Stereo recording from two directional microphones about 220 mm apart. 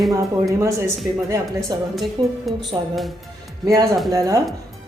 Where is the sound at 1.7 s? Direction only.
15° right (ahead or behind).